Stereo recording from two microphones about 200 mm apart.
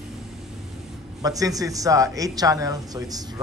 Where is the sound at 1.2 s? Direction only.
15° right (ahead or behind).